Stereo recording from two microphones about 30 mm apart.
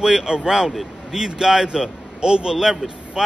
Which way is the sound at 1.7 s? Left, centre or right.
Right.